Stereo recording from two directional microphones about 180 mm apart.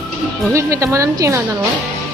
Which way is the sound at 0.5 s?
15° right (ahead or behind).